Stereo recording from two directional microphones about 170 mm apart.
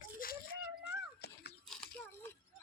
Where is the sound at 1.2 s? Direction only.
70° left (ahead or behind).